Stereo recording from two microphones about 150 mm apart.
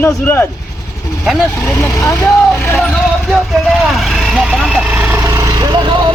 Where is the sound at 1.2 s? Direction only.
5° right (ahead or behind).